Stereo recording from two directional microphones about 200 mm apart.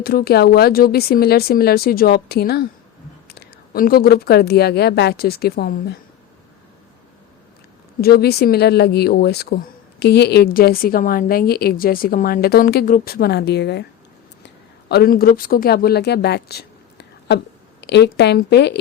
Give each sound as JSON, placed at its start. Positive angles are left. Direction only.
{"t": 0.0, "sound": "a woman's voice", "side_deg": 50}
{"t": 8.0, "sound": "a woman's voice", "side_deg": 55}